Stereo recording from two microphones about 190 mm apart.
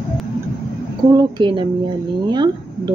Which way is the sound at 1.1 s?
25° right (ahead or behind).